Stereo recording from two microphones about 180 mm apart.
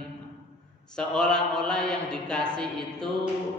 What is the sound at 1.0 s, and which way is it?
A man's voice, 5° left (ahead or behind).